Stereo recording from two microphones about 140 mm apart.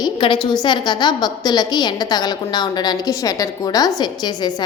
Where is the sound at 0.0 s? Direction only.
35° left (ahead or behind).